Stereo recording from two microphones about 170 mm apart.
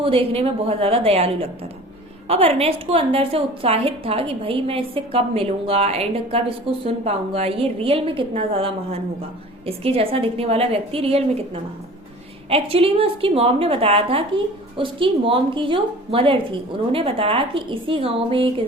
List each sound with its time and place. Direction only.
0.0 s a woman's voice: 35° right (ahead or behind)